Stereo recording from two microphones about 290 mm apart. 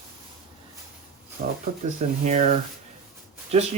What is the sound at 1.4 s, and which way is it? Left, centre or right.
Speech, right.